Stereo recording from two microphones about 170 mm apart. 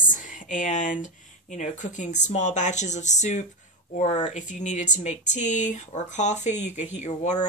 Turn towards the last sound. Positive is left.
turn(degrees=45)  # may be behind; listen again after turning